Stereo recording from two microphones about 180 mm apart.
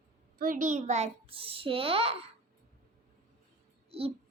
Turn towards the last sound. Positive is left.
turn(degrees=-30)  # may be behind; listen again after turning